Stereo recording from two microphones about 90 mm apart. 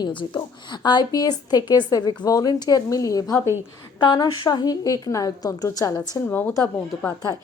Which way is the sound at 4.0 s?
55° left (ahead or behind).